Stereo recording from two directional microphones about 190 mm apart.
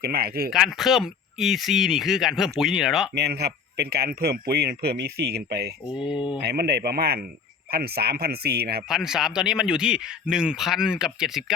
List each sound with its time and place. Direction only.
0.0 s speech: 55° right (ahead or behind)
0.5 s speech: centre (ahead or behind)
3.2 s speech: 60° right (ahead or behind)
8.9 s speech: centre (ahead or behind)